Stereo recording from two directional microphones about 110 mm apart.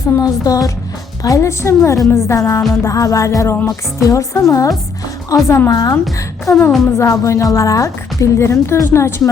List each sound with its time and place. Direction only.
0.2 s a woman's voice: 35° left (ahead or behind)